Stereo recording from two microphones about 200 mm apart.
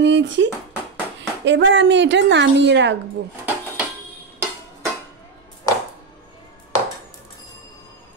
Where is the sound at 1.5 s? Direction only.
65° right (ahead or behind).